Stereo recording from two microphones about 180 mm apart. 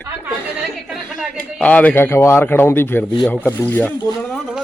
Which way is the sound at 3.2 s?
10° left (ahead or behind).